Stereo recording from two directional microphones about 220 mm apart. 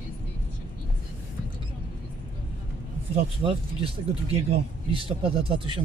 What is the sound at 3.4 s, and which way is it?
Speech, 25° right (ahead or behind).